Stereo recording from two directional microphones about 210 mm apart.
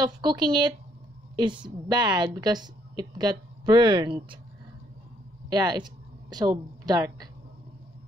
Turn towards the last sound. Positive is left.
turn(degrees=-20)  # may be behind; listen again after turning